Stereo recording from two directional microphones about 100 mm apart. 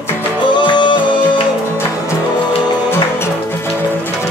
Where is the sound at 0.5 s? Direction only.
50° left (ahead or behind).